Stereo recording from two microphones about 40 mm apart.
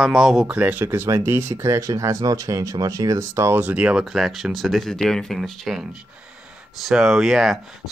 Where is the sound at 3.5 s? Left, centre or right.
Right.